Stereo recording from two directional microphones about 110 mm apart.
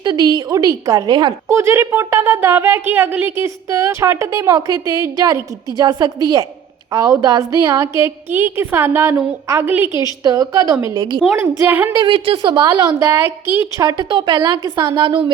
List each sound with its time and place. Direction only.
0.0 s a woman's voice: 40° right (ahead or behind)
1.5 s a woman's voice: 25° right (ahead or behind)
10.0 s a woman's voice: 35° right (ahead or behind)
10.9 s a woman's voice: 40° right (ahead or behind)
11.3 s a woman's voice: 20° right (ahead or behind)
11.9 s a woman's voice: 50° right (ahead or behind)
13.0 s a woman's voice: 20° right (ahead or behind)
13.8 s a woman's voice: 45° right (ahead or behind)
14.3 s a woman's voice: 35° right (ahead or behind)
15.0 s a woman's voice: 50° right (ahead or behind)